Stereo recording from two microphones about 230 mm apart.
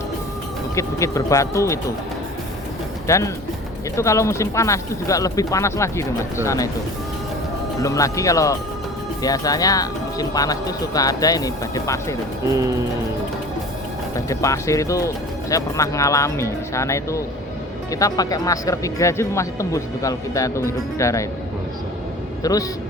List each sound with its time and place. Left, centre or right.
0.8 s speech: centre
3.1 s speech: centre
7.8 s speech: centre
14.3 s speech: centre
22.4 s speech: centre